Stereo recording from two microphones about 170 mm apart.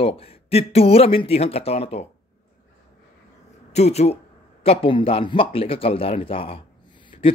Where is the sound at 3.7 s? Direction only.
40° left (ahead or behind).